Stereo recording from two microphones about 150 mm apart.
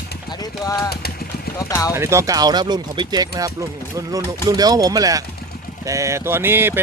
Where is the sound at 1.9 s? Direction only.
20° right (ahead or behind).